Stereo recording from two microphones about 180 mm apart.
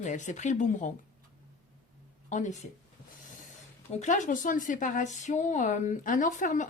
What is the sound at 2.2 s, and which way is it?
Speech, 40° left (ahead or behind).